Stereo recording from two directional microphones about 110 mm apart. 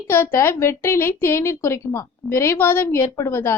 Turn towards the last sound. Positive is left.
turn(degrees=25)  # may be behind; listen again after turning